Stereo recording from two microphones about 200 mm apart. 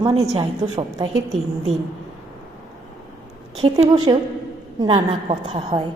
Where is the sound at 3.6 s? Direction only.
25° right (ahead or behind).